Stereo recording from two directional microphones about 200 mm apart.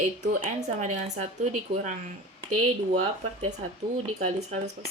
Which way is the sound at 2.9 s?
35° right (ahead or behind).